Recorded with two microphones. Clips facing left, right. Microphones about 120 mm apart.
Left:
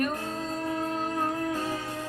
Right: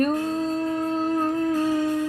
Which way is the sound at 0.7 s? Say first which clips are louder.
Right 5 dB; 25° right (ahead or behind).